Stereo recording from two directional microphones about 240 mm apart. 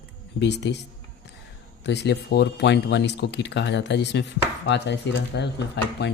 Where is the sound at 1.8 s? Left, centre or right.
Left.